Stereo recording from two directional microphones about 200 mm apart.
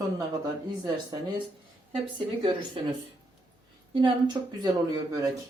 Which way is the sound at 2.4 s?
25° right (ahead or behind).